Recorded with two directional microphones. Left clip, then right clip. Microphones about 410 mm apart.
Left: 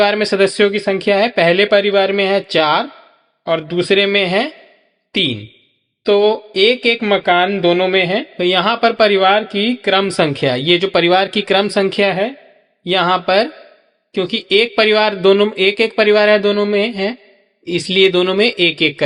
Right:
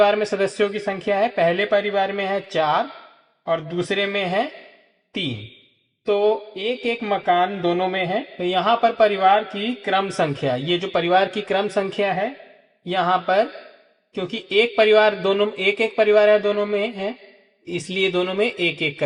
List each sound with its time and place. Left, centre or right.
0.0 s speech: left
6.1 s speech: left